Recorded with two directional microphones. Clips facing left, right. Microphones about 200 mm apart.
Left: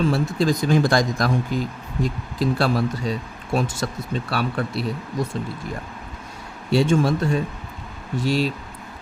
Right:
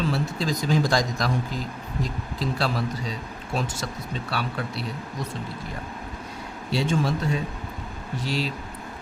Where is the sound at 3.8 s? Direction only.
50° left (ahead or behind).